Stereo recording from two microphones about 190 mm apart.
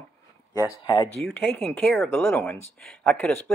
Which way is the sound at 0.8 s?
20° left (ahead or behind).